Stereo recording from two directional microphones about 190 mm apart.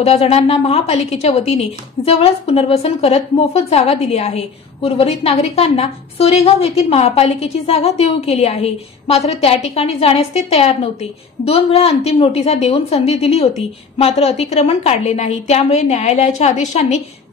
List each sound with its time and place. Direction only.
0.0 s speech: 35° left (ahead or behind)